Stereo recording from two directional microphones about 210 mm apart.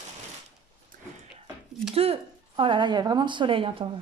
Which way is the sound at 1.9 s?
25° right (ahead or behind).